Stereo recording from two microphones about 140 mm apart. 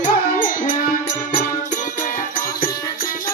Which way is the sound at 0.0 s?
70° left (ahead or behind).